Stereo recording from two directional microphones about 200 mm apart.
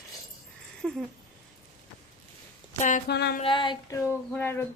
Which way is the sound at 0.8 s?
Centre (ahead or behind).